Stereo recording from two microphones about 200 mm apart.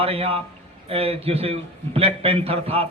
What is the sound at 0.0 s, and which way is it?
A man's voice, 30° right (ahead or behind).